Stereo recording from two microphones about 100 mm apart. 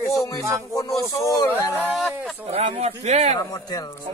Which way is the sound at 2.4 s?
90° right.